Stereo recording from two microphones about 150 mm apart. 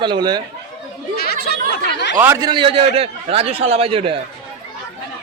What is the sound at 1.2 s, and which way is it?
Chatter, 90° left.